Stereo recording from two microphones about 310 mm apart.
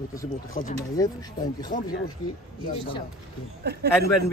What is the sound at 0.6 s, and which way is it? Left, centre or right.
A man's voice, centre.